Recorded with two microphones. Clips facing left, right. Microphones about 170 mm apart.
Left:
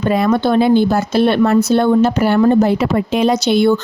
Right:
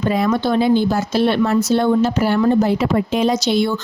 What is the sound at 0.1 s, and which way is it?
Speech, 60° left (ahead or behind).